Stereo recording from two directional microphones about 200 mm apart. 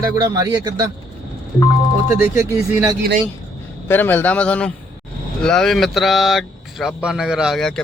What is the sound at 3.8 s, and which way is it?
A man's voice, 10° left (ahead or behind).